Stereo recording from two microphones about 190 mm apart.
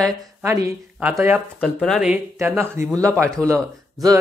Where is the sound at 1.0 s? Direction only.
10° right (ahead or behind).